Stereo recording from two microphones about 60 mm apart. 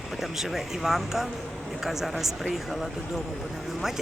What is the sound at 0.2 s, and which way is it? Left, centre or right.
Speech, centre.